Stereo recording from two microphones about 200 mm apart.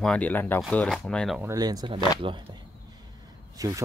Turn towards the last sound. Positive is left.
turn(degrees=-15)  # may be behind; listen again after turning